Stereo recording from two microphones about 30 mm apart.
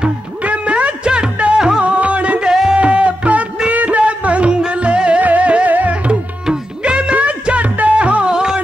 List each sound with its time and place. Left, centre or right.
0.4 s music: right
1.8 s music: right
2.4 s music: centre
2.7 s music: right
4.0 s music: right
5.2 s music: right
5.7 s music: right
6.8 s music: right
8.3 s music: right